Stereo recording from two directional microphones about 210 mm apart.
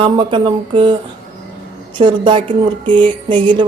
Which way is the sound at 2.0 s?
25° right (ahead or behind).